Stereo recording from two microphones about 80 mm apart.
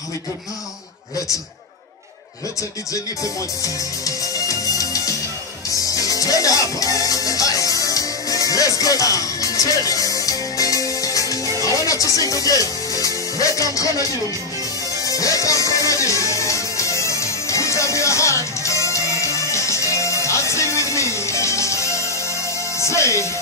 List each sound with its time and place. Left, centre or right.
3.6 s music: left
11.6 s speech: left
15.0 s music: left
22.8 s speech: left